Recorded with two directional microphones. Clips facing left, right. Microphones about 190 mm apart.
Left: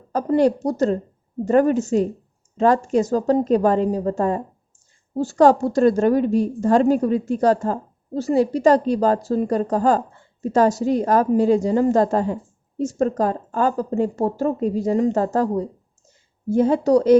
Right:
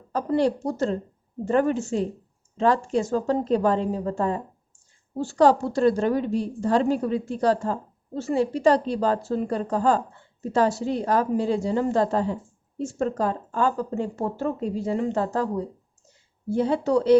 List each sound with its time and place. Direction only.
0.1 s a woman's voice: 45° left (ahead or behind)